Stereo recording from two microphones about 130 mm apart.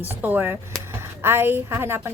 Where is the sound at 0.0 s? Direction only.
15° right (ahead or behind).